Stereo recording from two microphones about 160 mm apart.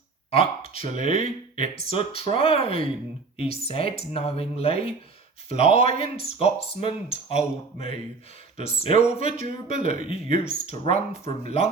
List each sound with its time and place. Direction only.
0.3 s speech: 35° left (ahead or behind)
6.0 s speech: 40° left (ahead or behind)
9.1 s speech: 55° right (ahead or behind)
10.1 s speech: 40° left (ahead or behind)